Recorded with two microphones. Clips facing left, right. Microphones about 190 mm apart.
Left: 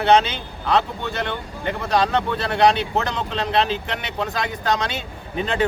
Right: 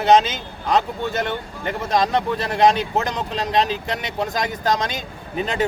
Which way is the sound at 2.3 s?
40° right (ahead or behind).